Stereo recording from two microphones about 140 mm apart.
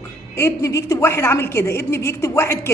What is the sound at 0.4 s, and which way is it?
A woman's voice, 20° left (ahead or behind).